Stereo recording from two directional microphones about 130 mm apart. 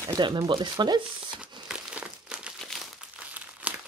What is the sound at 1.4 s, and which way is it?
Crumpling, 5° right (ahead or behind).